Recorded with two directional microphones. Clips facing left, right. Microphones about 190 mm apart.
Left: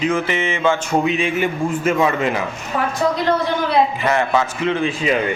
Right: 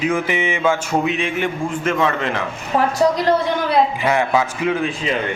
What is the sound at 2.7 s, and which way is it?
Speech, 35° right (ahead or behind).